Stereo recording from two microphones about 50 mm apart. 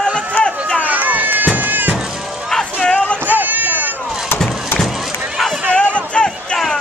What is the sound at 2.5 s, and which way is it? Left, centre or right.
Music, centre.